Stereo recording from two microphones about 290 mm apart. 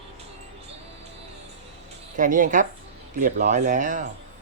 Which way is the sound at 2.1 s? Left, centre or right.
Right.